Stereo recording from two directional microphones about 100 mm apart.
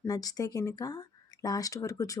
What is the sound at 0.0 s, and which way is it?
Speech, 40° left (ahead or behind).